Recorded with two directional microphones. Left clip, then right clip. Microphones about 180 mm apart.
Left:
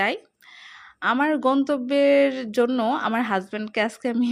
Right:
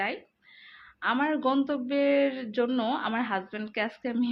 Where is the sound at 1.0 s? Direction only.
35° left (ahead or behind).